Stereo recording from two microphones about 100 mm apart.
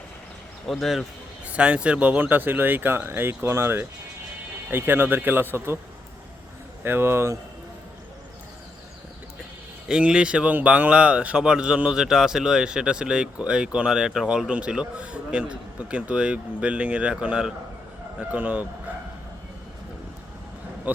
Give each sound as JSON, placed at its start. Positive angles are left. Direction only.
{"t": 0.7, "sound": "a man's voice", "side_deg": 0}
{"t": 1.5, "sound": "speech", "side_deg": -10}
{"t": 6.8, "sound": "speech", "side_deg": -20}
{"t": 9.9, "sound": "speech", "side_deg": -10}
{"t": 20.9, "sound": "speech", "side_deg": -15}